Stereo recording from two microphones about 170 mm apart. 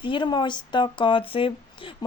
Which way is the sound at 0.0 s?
30° left (ahead or behind).